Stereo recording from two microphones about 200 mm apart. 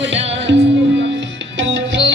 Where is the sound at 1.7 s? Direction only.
65° right (ahead or behind).